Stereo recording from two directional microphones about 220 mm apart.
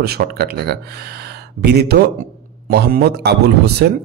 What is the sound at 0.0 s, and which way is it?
A man's voice, 45° right (ahead or behind).